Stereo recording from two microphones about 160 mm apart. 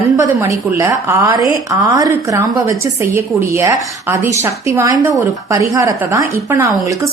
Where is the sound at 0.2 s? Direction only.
20° right (ahead or behind).